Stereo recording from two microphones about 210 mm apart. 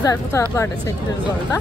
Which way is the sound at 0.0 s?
15° left (ahead or behind).